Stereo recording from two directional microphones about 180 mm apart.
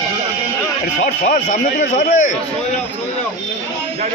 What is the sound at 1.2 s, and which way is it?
A man's voice, 45° left (ahead or behind).